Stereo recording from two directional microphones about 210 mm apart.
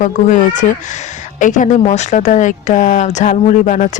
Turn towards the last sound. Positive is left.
turn(degrees=35)  # may be behind; listen again after turning